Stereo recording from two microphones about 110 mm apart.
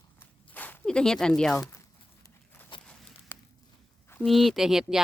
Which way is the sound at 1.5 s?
25° left (ahead or behind).